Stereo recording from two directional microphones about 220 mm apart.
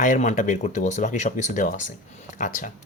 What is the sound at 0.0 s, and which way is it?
Speech, 35° left (ahead or behind).